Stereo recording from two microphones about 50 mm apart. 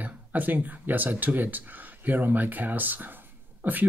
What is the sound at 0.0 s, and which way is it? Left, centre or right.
Speech, right.